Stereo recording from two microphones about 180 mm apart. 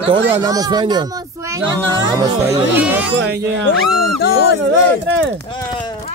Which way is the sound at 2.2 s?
15° right (ahead or behind).